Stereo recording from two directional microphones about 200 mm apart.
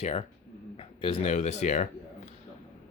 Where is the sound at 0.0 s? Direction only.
35° left (ahead or behind).